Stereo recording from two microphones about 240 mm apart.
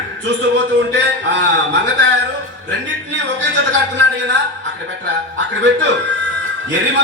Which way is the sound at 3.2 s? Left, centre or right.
Right.